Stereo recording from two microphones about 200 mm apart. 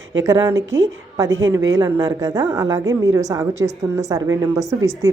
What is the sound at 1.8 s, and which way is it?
A woman's voice, 15° right (ahead or behind).